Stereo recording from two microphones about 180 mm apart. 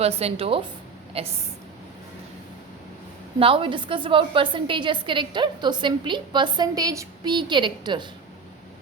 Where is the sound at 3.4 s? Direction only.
30° right (ahead or behind).